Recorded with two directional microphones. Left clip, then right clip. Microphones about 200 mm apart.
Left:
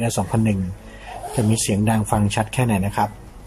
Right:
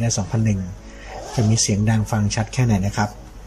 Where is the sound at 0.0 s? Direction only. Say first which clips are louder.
Left 3 dB; 15° left (ahead or behind).